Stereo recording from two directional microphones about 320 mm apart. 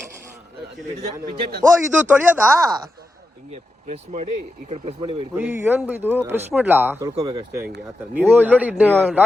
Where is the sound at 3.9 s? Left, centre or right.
Right; by 9.2 s centre.